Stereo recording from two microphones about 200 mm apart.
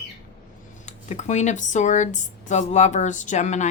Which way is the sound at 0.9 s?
35° left (ahead or behind).